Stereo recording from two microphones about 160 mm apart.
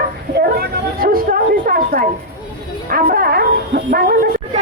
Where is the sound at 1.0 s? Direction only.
65° right (ahead or behind).